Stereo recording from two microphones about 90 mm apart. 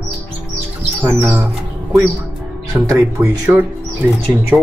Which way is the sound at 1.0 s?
25° right (ahead or behind).